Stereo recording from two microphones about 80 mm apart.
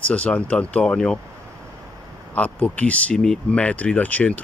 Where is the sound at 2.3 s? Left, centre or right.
Centre.